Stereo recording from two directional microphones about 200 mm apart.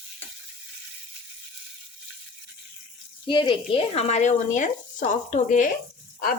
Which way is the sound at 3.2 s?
25° left (ahead or behind).